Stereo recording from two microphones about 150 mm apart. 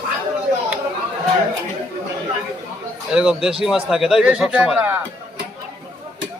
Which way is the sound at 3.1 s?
5° right (ahead or behind).